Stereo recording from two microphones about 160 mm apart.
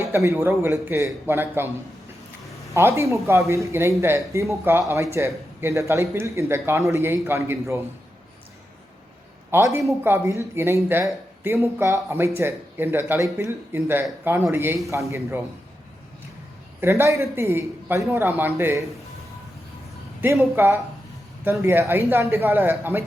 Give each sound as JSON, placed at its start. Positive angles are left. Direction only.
{"t": 0.0, "sound": "speech", "side_deg": -20}
{"t": 2.7, "sound": "speech", "side_deg": -15}
{"t": 9.5, "sound": "speech", "side_deg": -20}
{"t": 16.8, "sound": "speech", "side_deg": -15}
{"t": 20.2, "sound": "speech", "side_deg": -15}